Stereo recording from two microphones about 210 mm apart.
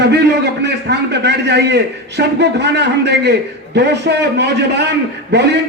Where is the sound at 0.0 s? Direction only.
55° right (ahead or behind).